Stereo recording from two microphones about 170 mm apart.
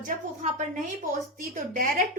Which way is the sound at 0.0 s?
50° right (ahead or behind).